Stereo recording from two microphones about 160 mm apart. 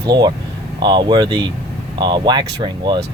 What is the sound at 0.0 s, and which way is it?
Speech, 25° right (ahead or behind).